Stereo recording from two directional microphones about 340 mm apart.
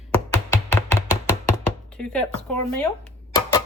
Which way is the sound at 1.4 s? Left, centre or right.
Centre.